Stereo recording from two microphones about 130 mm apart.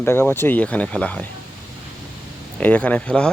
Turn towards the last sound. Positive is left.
turn(degrees=10)  # may be behind; listen again after turning